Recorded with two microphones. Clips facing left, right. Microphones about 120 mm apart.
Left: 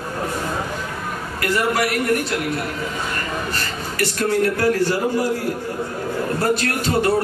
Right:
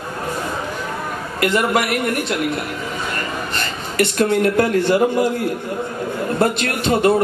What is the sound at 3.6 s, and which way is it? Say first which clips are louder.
Speech: right 4 dB; 20° right (ahead or behind).